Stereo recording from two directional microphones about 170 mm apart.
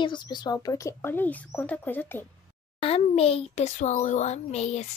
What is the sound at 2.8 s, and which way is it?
A child's voice, 35° left (ahead or behind).